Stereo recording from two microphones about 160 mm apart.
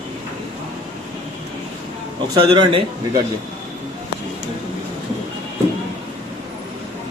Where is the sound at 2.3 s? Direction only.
30° right (ahead or behind).